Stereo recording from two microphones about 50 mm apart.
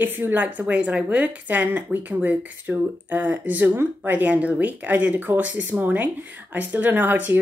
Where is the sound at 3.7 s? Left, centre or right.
Right.